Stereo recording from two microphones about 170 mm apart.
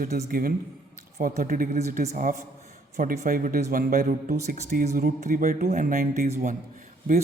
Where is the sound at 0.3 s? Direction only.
55° right (ahead or behind).